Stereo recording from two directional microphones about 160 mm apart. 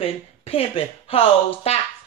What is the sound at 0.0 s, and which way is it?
Speech, 35° left (ahead or behind).